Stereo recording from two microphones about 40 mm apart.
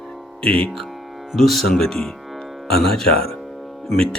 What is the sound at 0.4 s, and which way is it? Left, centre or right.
Speech, left.